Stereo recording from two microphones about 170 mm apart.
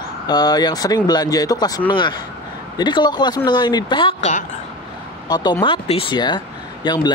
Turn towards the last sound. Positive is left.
turn(degrees=25)  # may be behind; listen again after turning